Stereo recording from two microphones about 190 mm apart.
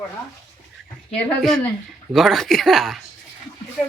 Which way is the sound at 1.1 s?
5° left (ahead or behind).